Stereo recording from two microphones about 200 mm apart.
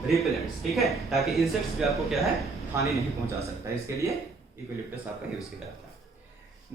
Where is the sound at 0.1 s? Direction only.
Centre (ahead or behind).